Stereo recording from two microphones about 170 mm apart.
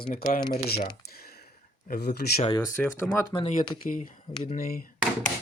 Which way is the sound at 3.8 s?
50° left (ahead or behind).